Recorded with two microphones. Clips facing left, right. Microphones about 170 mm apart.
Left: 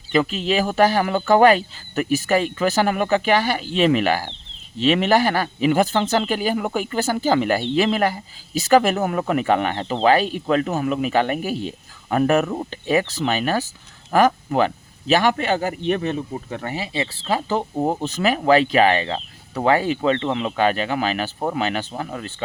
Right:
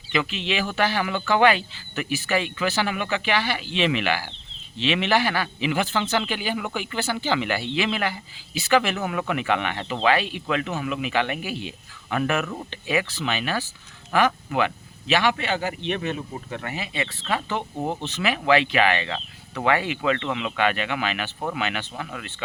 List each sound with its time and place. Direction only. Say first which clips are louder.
0.1 s a man's voice: left 6 dB; 40° left (ahead or behind)